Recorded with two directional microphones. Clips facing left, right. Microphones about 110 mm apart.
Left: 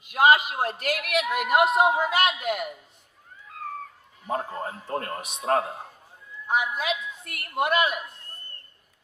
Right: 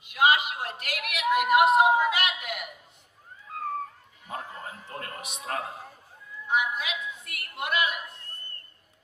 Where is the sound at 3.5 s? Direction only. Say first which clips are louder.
Right 3 dB; 35° right (ahead or behind).